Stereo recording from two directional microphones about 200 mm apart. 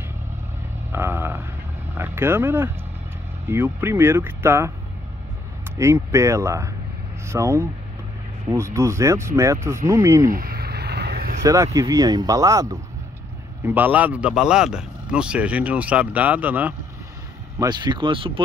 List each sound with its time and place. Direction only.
0.9 s a sound: 10° right (ahead or behind)
2.0 s speech: 10° right (ahead or behind)
5.8 s speech: 15° right (ahead or behind)
10.3 s a sound: 45° right (ahead or behind)
11.4 s speech: 15° right (ahead or behind)
17.6 s speech: 20° right (ahead or behind)